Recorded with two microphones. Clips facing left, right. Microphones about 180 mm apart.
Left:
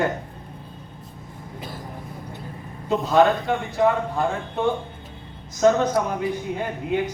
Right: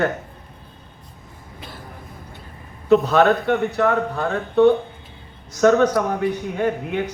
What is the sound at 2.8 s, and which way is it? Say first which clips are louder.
Speech: right 3 dB; 70° right (ahead or behind).